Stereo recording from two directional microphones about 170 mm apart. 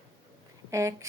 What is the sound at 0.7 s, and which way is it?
Speech, 20° right (ahead or behind).